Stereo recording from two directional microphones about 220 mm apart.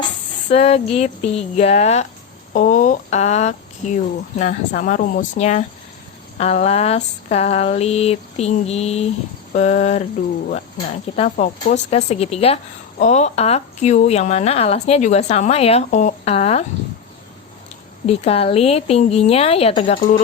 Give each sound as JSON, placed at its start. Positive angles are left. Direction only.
{"t": 0.5, "sound": "a woman's voice", "side_deg": 30}
{"t": 11.2, "sound": "a woman's voice", "side_deg": 30}
{"t": 18.0, "sound": "a woman's voice", "side_deg": 25}